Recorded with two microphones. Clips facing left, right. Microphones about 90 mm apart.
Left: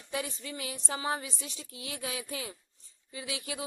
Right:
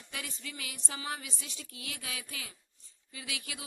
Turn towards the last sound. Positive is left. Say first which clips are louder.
# left 5 dB
turn(degrees=30)  # may be behind; listen again after turning